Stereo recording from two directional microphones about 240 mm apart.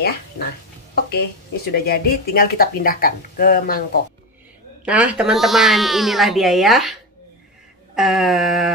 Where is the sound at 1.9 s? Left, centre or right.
Left.